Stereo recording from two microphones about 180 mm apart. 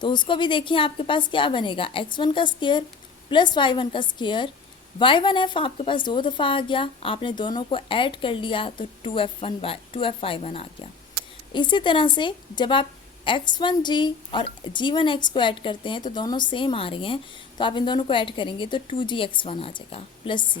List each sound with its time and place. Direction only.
0.0 s a woman's voice: 25° left (ahead or behind)